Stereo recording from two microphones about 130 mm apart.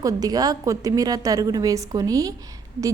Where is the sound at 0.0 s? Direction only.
30° right (ahead or behind).